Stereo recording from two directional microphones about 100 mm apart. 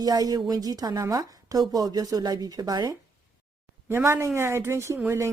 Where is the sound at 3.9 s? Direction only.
25° right (ahead or behind).